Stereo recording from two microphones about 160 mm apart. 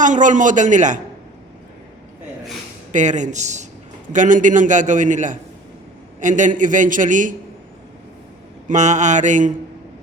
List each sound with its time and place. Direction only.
0.0 s a man's voice: 50° right (ahead or behind)
2.9 s a man's voice: 50° right (ahead or behind)
8.6 s a man's voice: 50° right (ahead or behind)